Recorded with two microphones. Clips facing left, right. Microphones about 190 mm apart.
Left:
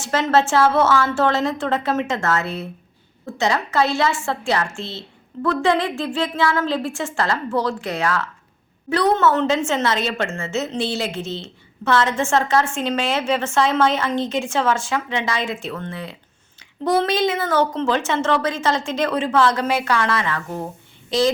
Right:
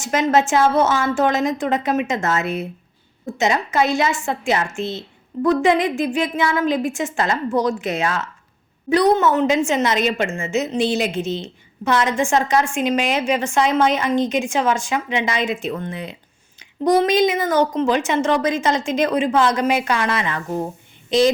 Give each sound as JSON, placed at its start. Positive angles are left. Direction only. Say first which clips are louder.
{"t": 0.0, "sound": "a woman's voice", "louder": "right 1 dB", "side_deg": -15}
{"t": 21.1, "sound": "child singing", "louder": "right 3 dB", "side_deg": -20}